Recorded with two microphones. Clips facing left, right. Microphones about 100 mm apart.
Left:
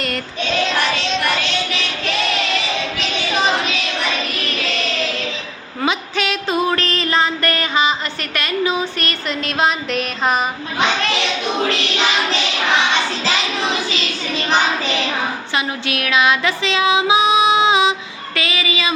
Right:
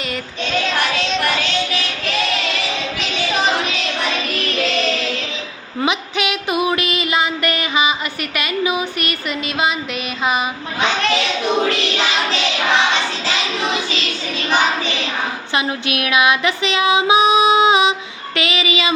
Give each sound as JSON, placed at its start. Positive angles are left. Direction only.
{"t": 5.8, "sound": "a sound", "side_deg": -15}
{"t": 9.6, "sound": "music", "side_deg": -5}
{"t": 15.5, "sound": "female singing", "side_deg": -20}
{"t": 18.3, "sound": "speech", "side_deg": -20}